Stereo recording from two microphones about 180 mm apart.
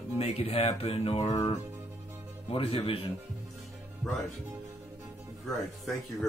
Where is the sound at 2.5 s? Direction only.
30° left (ahead or behind).